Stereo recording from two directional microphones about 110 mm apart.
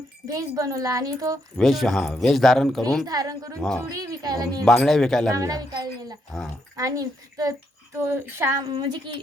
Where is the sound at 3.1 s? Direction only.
35° right (ahead or behind).